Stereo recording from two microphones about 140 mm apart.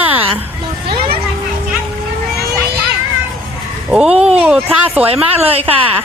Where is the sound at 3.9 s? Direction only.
5° right (ahead or behind).